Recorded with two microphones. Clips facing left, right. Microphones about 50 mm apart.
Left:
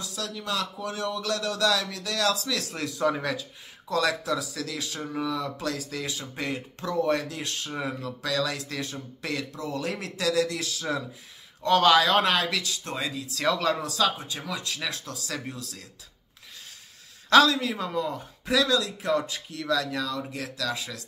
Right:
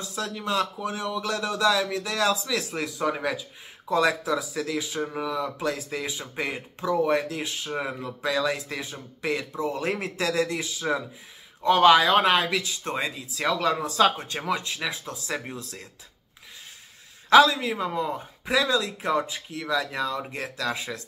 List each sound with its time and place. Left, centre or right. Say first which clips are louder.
0.0 s speech: right 3 dB; right
13.4 s speech: right 1 dB; centre
13.8 s speech: right 4 dB; right
14.6 s speech: right 2 dB; centre
17.3 s speech: right 2 dB; centre